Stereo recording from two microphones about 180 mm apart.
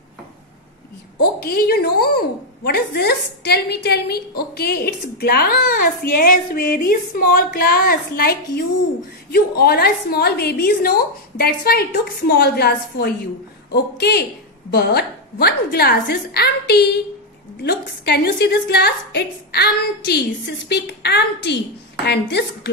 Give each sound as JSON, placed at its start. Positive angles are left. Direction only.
{"t": 1.4, "sound": "a woman's voice", "side_deg": 60}